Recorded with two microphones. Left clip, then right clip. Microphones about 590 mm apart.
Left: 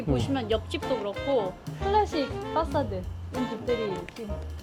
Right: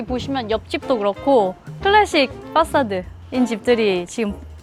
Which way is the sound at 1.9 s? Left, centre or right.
Right.